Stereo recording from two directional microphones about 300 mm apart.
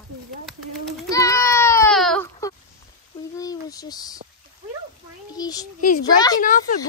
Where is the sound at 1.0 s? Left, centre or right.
Centre.